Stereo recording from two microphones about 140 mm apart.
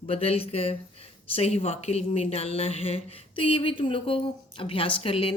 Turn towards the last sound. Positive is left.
turn(degrees=40)  # may be behind; listen again after turning